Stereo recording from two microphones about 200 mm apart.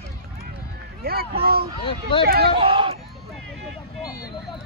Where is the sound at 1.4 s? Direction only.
50° right (ahead or behind).